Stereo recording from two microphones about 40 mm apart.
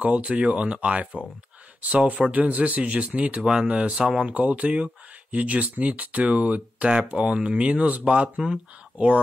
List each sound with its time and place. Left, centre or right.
0.0 s speech: right
2.3 s speech: right; by 4.3 s centre
4.3 s speech: right